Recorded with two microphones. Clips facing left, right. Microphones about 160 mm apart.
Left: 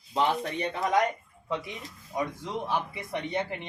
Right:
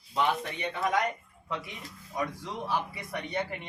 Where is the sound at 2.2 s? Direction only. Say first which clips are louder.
Left 2 dB; 25° left (ahead or behind).